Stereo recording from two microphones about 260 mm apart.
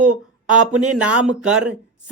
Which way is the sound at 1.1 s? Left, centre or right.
Right.